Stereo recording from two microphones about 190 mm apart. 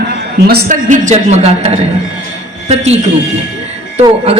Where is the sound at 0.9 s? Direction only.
35° right (ahead or behind).